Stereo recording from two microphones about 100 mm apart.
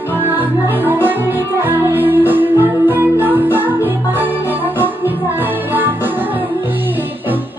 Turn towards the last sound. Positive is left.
turn(degrees=-20)  # may be behind; listen again after turning